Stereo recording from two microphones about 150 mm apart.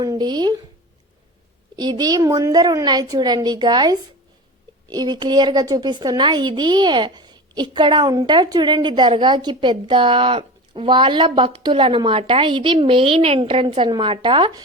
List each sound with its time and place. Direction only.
0.0 s speech: 25° right (ahead or behind)
1.7 s a woman's voice: 30° right (ahead or behind)